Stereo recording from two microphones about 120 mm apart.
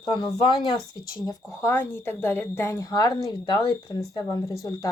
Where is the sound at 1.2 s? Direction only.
20° left (ahead or behind).